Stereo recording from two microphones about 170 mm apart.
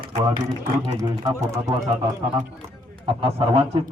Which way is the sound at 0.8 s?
20° right (ahead or behind).